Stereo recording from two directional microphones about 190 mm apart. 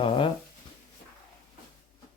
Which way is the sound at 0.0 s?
25° left (ahead or behind).